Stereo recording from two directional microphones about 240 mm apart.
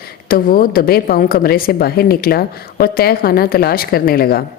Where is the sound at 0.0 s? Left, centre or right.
Left.